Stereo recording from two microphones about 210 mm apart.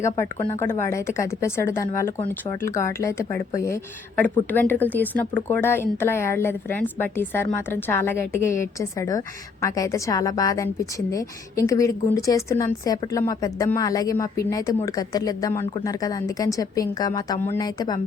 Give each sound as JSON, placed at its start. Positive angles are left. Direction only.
{"t": 0.6, "sound": "speech", "side_deg": 10}